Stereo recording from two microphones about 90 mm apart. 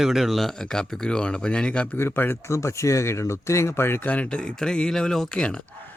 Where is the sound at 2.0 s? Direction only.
25° left (ahead or behind).